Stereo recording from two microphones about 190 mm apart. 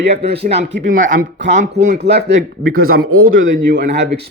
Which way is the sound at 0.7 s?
80° right.